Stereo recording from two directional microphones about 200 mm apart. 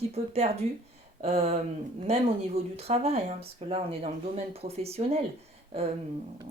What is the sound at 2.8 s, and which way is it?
Speech, 30° right (ahead or behind).